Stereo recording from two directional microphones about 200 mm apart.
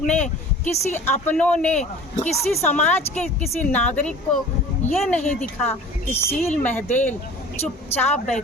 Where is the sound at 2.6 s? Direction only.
10° left (ahead or behind).